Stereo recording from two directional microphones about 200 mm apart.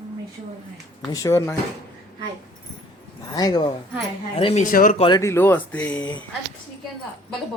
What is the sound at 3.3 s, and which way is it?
Speech, 20° left (ahead or behind).